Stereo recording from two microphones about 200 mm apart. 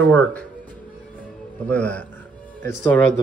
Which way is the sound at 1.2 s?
5° left (ahead or behind).